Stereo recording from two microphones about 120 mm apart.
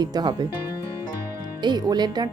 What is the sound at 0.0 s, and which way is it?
Speech, 35° right (ahead or behind).